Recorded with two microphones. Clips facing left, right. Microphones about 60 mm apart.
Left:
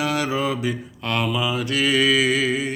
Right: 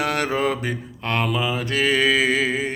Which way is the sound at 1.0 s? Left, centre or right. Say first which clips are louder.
Right 1 dB; right.